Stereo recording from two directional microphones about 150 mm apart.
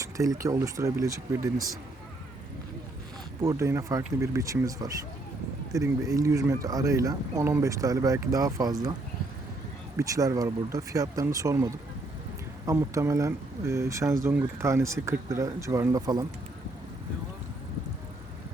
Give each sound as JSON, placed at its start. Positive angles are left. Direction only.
{"t": 0.0, "sound": "speech", "side_deg": -20}
{"t": 3.4, "sound": "speech", "side_deg": -20}
{"t": 10.0, "sound": "speech", "side_deg": -20}